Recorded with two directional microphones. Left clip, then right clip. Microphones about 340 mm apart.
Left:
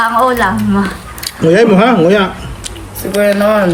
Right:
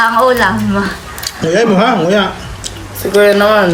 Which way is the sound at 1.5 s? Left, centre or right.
Left.